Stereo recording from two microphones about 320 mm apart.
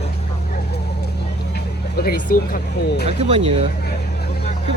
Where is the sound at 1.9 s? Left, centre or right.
Left.